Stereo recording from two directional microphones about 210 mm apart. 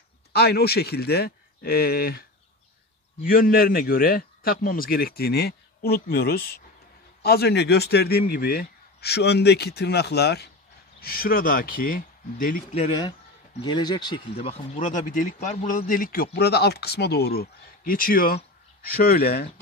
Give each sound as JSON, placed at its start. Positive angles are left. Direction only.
{"t": 0.3, "sound": "speech", "side_deg": 50}
{"t": 3.3, "sound": "speech", "side_deg": 45}
{"t": 13.6, "sound": "speech", "side_deg": 20}